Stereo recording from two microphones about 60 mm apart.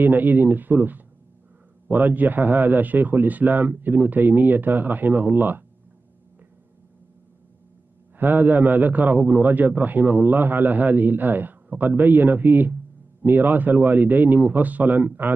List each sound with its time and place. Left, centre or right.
0.0 s a man's voice: right
8.2 s a man's voice: right